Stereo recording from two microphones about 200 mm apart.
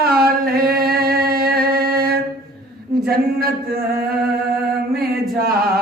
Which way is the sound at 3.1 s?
50° right (ahead or behind).